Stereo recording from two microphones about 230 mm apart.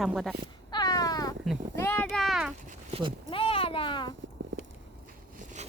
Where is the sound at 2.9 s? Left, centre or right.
Right.